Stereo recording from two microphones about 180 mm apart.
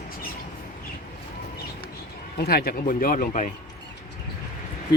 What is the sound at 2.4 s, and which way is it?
Speech, 60° left (ahead or behind).